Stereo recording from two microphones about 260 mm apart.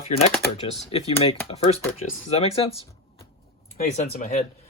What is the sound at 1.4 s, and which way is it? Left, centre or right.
Speech, left.